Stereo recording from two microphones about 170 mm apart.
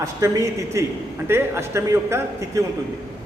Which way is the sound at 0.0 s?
20° right (ahead or behind).